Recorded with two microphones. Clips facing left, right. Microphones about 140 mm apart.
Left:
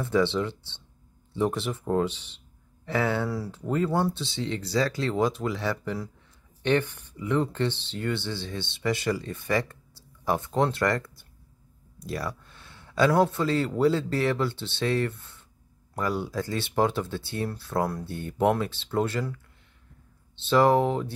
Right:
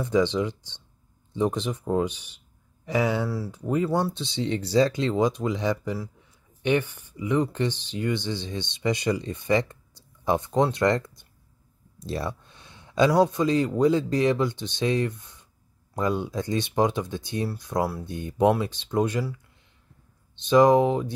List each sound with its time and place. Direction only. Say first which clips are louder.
0.0 s speech: right 2 dB; 15° right (ahead or behind)
3.3 s speech: right 1 dB; 5° right (ahead or behind)
3.6 s speech: right 1 dB; 15° right (ahead or behind)